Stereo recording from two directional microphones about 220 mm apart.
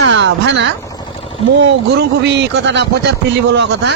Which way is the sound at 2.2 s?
50° right (ahead or behind).